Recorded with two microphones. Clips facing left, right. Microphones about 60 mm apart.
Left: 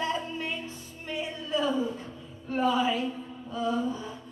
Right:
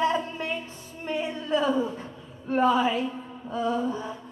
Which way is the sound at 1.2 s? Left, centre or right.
Right.